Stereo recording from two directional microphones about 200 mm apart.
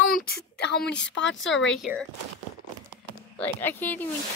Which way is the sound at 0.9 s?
65° left (ahead or behind).